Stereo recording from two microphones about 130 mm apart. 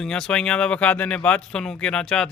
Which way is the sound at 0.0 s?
5° left (ahead or behind).